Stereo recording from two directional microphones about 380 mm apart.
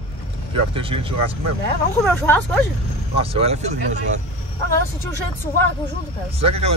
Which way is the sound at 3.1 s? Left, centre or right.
Centre.